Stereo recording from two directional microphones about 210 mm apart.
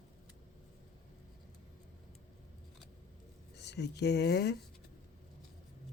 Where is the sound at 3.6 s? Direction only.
55° left (ahead or behind).